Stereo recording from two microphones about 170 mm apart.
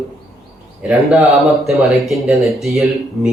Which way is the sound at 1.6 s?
Centre (ahead or behind).